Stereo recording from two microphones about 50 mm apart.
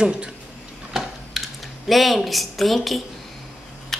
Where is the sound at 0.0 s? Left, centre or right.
Centre.